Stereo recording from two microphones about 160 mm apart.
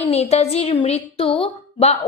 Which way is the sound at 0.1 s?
40° left (ahead or behind).